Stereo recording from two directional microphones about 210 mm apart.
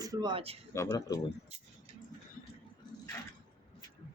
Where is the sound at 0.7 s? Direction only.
15° left (ahead or behind).